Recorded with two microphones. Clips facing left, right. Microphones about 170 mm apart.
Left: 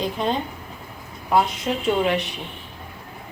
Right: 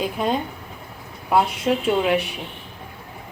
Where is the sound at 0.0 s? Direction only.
5° right (ahead or behind).